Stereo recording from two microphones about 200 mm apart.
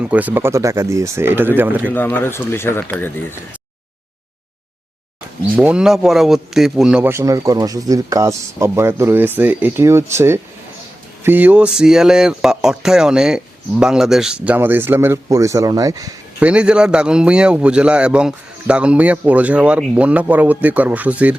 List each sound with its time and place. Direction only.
0.0 s a man's voice: 10° right (ahead or behind)
1.9 s speech: 10° left (ahead or behind)
5.5 s a man's voice: 5° right (ahead or behind)
16.5 s a man's voice: 5° right (ahead or behind)